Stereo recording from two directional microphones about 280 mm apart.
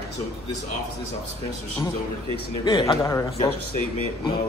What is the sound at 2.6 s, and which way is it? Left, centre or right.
Speech, centre.